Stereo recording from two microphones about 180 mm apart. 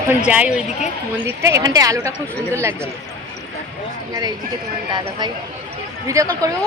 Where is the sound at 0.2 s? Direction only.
5° right (ahead or behind).